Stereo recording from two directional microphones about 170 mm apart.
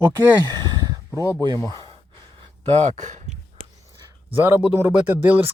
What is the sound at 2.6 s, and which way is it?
Speech, 40° right (ahead or behind).